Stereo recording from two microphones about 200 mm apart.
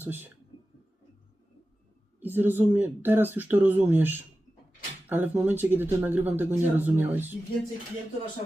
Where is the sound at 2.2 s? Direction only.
10° right (ahead or behind).